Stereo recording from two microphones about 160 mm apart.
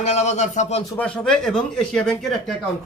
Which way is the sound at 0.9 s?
5° left (ahead or behind).